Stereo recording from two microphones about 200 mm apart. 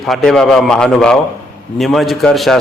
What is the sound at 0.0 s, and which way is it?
A man's voice, centre (ahead or behind).